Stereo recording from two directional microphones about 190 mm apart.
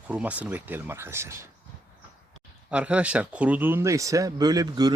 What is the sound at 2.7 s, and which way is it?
Speech, 5° right (ahead or behind).